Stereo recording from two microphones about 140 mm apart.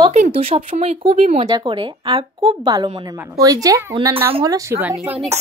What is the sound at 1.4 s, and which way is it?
A woman's voice, 35° right (ahead or behind).